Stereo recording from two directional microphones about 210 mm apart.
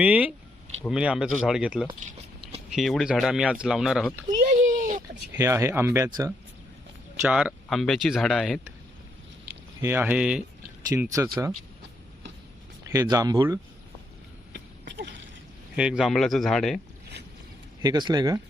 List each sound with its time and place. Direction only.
0.0 s speech: 5° right (ahead or behind)
4.4 s a sound: 40° right (ahead or behind)
5.3 s speech: 10° right (ahead or behind)
7.2 s speech: 5° right (ahead or behind)
9.8 s speech: 10° right (ahead or behind)
12.9 s speech: 15° right (ahead or behind)
14.5 s a sound: 55° right (ahead or behind)
15.7 s speech: 5° right (ahead or behind)
17.8 s speech: 20° right (ahead or behind)